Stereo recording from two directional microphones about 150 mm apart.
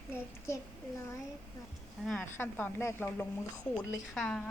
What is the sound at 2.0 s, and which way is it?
Speech, 15° left (ahead or behind).